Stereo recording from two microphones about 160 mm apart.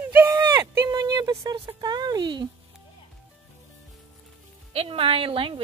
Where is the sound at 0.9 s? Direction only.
25° right (ahead or behind).